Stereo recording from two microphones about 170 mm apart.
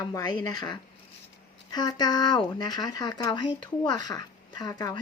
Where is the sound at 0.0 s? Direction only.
20° left (ahead or behind).